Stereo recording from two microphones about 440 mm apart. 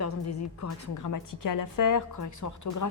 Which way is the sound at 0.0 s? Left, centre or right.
Left.